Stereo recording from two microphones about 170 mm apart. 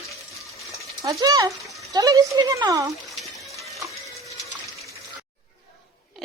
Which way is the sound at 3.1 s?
Centre (ahead or behind).